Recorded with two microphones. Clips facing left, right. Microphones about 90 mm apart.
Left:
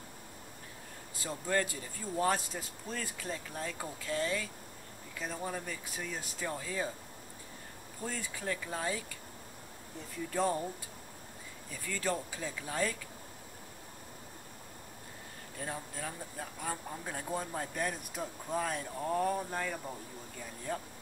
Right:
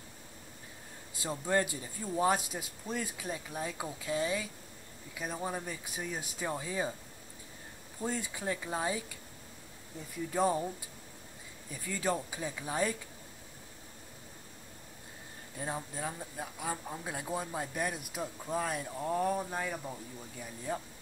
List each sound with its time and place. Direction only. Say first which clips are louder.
1.2 s speech: right 2 dB; 20° right (ahead or behind)
8.0 s speech: right 3 dB; 20° right (ahead or behind)
10.3 s speech: right 2 dB; 15° right (ahead or behind)
11.8 s speech: right 2 dB; 15° right (ahead or behind)
15.6 s speech: right 3 dB; 20° right (ahead or behind)